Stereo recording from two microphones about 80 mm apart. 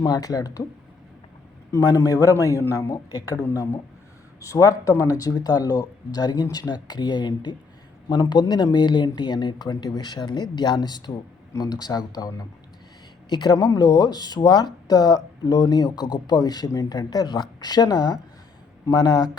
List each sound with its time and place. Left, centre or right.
0.0 s speech: left
1.7 s speech: left
3.1 s speech: left
13.3 s speech: left
16.6 s speech: left